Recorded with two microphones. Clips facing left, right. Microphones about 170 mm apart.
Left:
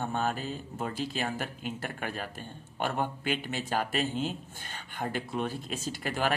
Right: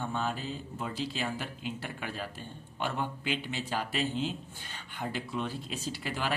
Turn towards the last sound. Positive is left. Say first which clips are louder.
# left 4 dB
turn(degrees=50)  # may be behind; listen again after turning